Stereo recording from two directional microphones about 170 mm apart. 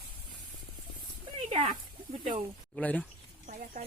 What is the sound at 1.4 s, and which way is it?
Speech, 30° right (ahead or behind).